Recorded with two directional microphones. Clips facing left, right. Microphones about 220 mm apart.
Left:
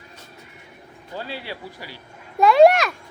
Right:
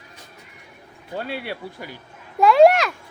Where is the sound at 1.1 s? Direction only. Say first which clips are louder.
Right 3 dB; 60° right (ahead or behind).